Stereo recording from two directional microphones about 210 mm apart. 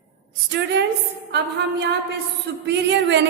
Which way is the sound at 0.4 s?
55° right (ahead or behind).